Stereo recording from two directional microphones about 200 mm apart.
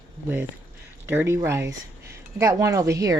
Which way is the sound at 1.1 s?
10° right (ahead or behind).